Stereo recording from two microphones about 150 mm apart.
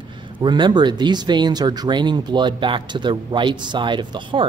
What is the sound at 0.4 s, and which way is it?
Speech, 30° right (ahead or behind).